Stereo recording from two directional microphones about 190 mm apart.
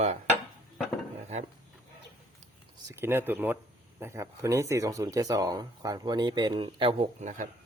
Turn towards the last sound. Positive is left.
turn(degrees=-40)  # may be behind; listen again after turning